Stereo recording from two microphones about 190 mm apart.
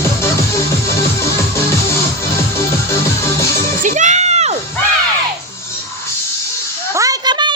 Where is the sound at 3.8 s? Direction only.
40° right (ahead or behind).